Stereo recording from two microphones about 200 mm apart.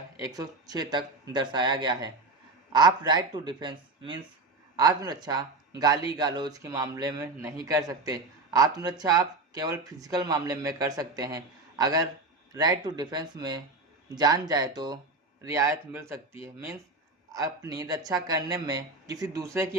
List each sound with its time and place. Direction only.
0.2 s speech: 15° right (ahead or behind)
17.3 s speech: 15° right (ahead or behind)